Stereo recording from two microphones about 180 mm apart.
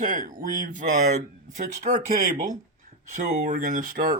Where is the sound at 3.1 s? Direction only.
45° right (ahead or behind).